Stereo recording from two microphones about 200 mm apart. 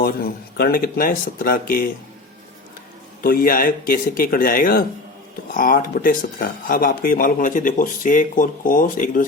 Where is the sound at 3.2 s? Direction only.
50° left (ahead or behind).